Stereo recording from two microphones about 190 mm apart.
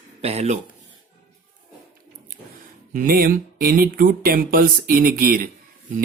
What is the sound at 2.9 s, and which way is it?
Speech, 45° right (ahead or behind).